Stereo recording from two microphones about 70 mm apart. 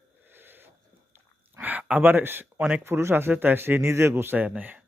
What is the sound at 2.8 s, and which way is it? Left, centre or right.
Speech, right.